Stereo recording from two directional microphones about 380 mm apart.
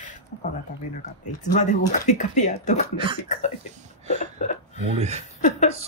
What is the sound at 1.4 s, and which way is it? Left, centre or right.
Speech, centre.